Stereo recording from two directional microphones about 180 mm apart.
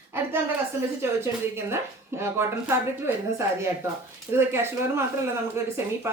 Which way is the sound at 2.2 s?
15° right (ahead or behind).